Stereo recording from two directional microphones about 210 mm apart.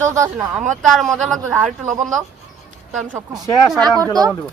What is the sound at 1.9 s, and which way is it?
Speech, 35° right (ahead or behind).